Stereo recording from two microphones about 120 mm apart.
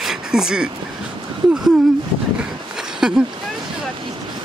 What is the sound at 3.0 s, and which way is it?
Speech, 5° right (ahead or behind).